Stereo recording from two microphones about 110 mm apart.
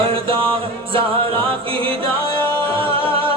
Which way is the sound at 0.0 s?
55° right (ahead or behind).